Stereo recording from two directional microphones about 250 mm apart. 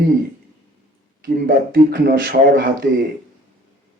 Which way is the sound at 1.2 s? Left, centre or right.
Right.